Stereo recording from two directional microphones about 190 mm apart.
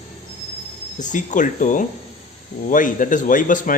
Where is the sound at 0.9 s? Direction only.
40° left (ahead or behind).